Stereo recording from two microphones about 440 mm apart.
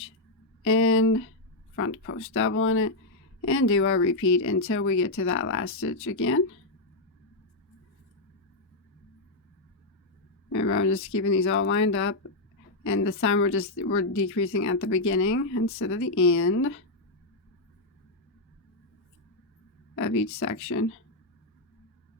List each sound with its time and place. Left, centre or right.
0.6 s speech: left
10.5 s speech: left
20.0 s speech: left